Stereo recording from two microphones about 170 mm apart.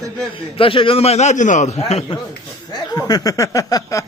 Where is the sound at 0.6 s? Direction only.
30° left (ahead or behind).